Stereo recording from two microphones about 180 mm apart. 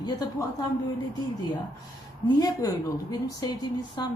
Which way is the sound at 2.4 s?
20° left (ahead or behind).